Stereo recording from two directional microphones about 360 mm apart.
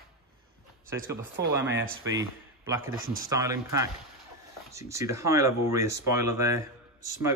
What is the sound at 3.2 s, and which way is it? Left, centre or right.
Speech, centre.